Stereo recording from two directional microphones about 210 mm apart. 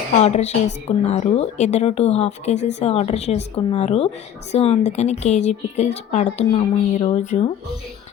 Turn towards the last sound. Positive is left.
turn(degrees=35)  # may be behind; listen again after turning